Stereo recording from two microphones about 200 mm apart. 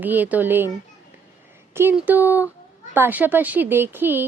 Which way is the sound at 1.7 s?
10° right (ahead or behind).